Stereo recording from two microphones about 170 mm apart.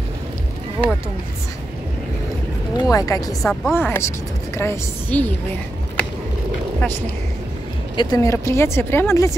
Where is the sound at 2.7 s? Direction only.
20° left (ahead or behind).